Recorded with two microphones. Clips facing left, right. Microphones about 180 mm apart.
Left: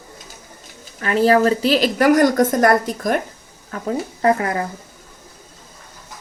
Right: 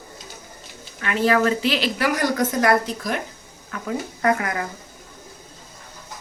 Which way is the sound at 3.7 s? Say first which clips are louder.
Left 4 dB; 30° left (ahead or behind).